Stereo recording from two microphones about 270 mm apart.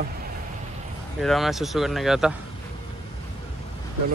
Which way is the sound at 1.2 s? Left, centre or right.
Centre.